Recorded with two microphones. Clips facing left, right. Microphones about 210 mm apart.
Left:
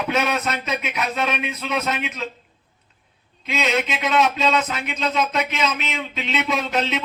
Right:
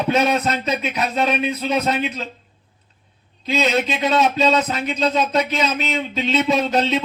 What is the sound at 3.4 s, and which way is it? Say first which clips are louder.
Speech: right 3 dB; 35° right (ahead or behind).